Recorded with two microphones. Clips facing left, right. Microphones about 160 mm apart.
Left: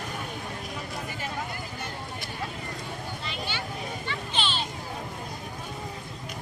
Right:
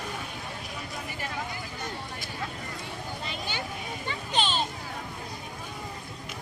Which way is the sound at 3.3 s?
45° right (ahead or behind).